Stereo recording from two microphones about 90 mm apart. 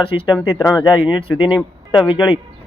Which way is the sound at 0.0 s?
90° left.